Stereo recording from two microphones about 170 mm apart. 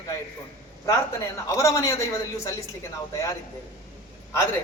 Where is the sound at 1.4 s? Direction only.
20° left (ahead or behind).